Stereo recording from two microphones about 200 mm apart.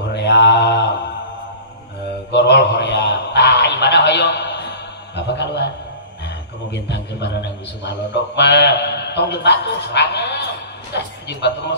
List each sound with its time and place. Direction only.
0.1 s mantra: 55° left (ahead or behind)
2.3 s a sound: 55° left (ahead or behind)
7.8 s a man's voice: 60° left (ahead or behind)